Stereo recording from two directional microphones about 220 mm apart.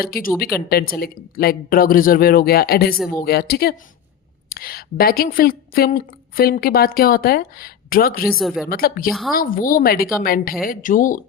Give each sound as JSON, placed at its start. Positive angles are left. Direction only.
{"t": 0.0, "sound": "a woman's voice", "side_deg": 45}
{"t": 8.3, "sound": "a woman's voice", "side_deg": 0}
{"t": 8.6, "sound": "speech", "side_deg": 40}